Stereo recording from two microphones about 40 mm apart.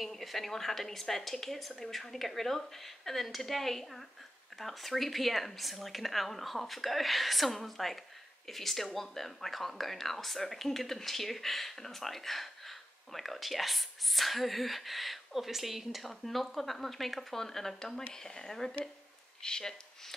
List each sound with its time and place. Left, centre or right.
0.0 s a woman's voice: centre